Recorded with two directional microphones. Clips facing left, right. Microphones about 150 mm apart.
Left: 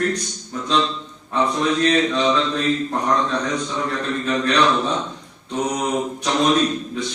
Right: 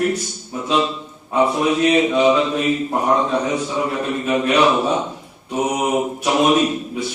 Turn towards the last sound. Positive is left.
turn(degrees=-10)  # may be behind; listen again after turning